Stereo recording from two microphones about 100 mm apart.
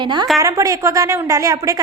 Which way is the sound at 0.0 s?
50° right (ahead or behind).